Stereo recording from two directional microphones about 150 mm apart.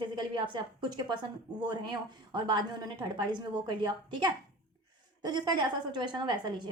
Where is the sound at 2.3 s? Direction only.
30° right (ahead or behind).